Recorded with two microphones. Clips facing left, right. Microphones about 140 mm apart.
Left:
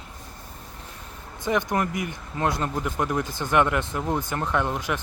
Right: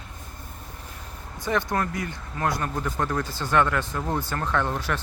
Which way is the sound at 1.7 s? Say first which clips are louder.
Left 1 dB; 20° left (ahead or behind).